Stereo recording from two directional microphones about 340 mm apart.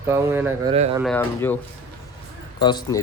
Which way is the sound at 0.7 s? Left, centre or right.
Centre.